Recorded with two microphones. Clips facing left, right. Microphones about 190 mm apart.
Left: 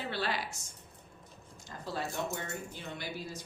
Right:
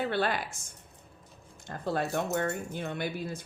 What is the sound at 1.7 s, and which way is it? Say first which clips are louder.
Speech: right 7 dB; 55° right (ahead or behind).